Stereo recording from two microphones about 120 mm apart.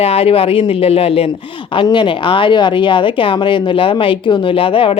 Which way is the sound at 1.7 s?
45° left (ahead or behind).